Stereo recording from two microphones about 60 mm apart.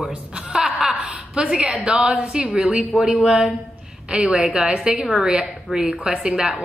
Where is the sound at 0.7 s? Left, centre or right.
Centre.